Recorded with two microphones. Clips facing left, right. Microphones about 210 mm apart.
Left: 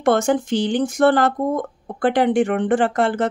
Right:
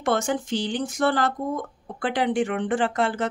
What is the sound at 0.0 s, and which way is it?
Speech, 50° left (ahead or behind).